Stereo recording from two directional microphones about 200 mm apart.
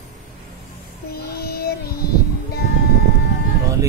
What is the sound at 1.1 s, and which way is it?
Child singing, 50° left (ahead or behind).